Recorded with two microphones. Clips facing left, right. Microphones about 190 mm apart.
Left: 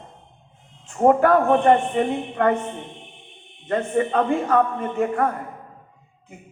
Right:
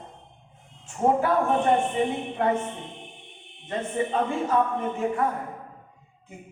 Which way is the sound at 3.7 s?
60° left (ahead or behind).